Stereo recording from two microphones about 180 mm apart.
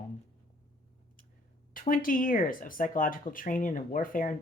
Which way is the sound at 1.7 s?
50° left (ahead or behind).